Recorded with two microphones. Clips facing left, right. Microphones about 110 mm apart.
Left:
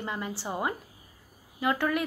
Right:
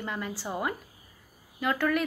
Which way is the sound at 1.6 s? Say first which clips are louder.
Even; 20° left (ahead or behind).